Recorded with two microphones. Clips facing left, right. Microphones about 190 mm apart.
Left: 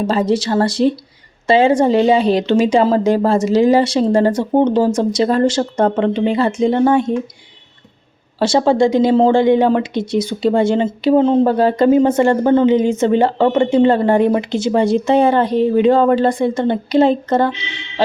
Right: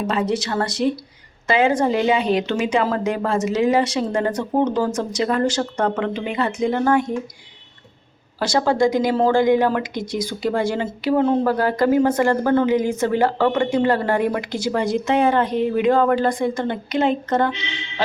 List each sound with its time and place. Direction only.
0.0 s a woman's voice: 35° left (ahead or behind)
8.4 s a woman's voice: 25° left (ahead or behind)